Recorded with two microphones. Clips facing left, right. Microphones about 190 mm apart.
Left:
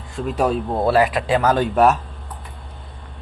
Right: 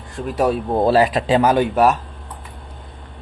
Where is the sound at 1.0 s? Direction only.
25° right (ahead or behind).